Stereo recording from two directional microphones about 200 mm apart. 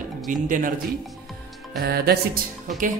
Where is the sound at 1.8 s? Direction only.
50° right (ahead or behind).